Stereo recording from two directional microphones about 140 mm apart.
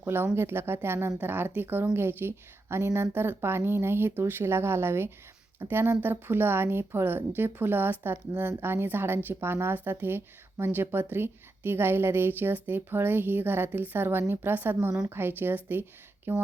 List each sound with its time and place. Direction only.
0.0 s a woman's voice: 15° right (ahead or behind)